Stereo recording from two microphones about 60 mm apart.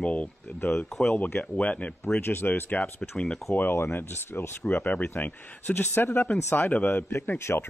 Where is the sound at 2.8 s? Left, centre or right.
Centre.